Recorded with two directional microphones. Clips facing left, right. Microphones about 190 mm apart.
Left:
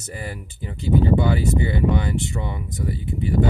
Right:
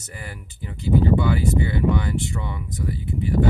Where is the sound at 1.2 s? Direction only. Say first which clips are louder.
Left 1 dB; 25° left (ahead or behind).